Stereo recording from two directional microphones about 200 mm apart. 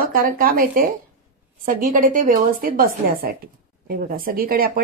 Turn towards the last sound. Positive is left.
turn(degrees=-45)  # may be behind; listen again after turning